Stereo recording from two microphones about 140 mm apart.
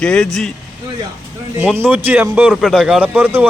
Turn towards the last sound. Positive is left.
turn(degrees=-15)  # may be behind; listen again after turning